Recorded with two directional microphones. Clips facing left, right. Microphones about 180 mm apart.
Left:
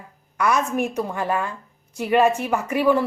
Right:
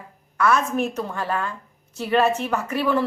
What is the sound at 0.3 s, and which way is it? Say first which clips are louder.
A woman's voice: right 1 dB; 15° left (ahead or behind).